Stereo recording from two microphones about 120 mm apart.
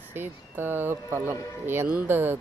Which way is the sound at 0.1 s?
15° right (ahead or behind).